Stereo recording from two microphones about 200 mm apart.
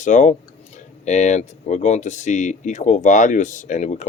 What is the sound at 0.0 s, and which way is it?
Speech, 35° left (ahead or behind).